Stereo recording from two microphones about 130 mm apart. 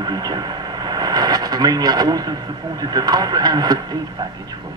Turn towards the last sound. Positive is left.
turn(degrees=-30)  # may be behind; listen again after turning